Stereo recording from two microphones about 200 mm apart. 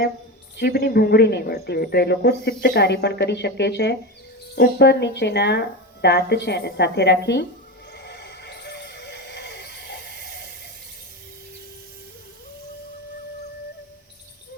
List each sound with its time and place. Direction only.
0.5 s speech: 55° left (ahead or behind)
7.9 s music: 55° left (ahead or behind)